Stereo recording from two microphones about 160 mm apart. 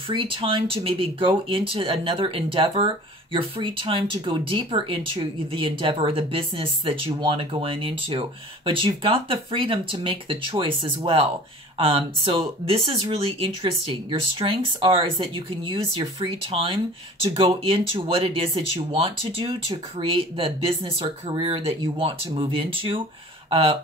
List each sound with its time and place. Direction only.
0.1 s speech: 35° right (ahead or behind)